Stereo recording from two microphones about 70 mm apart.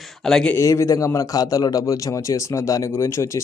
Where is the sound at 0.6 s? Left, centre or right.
Left.